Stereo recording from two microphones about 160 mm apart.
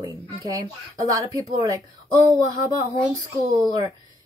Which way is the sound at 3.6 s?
25° right (ahead or behind).